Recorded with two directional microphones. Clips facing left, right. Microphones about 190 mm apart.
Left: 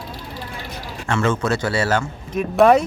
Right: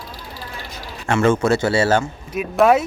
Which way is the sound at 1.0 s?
35° right (ahead or behind).